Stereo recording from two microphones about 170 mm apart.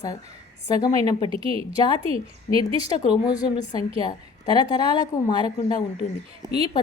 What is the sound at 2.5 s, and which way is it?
Speech, 45° left (ahead or behind).